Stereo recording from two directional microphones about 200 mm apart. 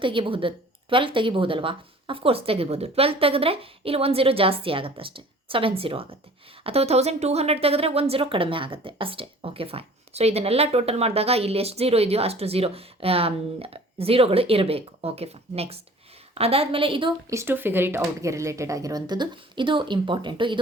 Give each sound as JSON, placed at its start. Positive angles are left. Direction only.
{"t": 0.0, "sound": "speech", "side_deg": -25}